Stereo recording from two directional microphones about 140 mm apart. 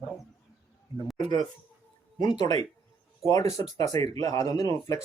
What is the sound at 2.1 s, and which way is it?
Speech, 30° left (ahead or behind).